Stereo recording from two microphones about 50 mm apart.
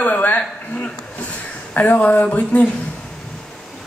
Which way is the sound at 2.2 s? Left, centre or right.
Left.